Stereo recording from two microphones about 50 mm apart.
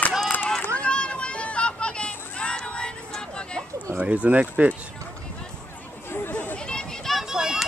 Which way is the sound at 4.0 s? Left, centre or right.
Right.